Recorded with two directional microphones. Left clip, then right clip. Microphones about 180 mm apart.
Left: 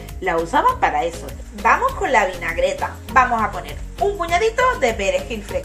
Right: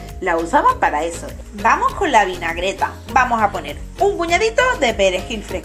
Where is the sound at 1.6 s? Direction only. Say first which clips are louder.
Right 1 dB; 50° right (ahead or behind).